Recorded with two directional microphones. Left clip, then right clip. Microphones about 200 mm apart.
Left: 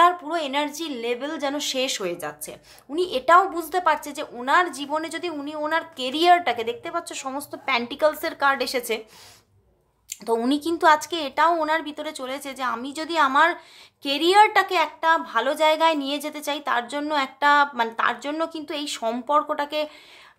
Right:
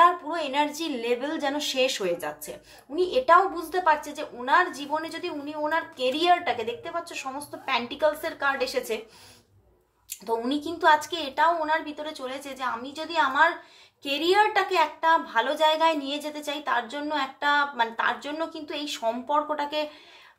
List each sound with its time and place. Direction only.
0.0 s a woman's voice: 35° left (ahead or behind)
10.0 s a woman's voice: 40° left (ahead or behind)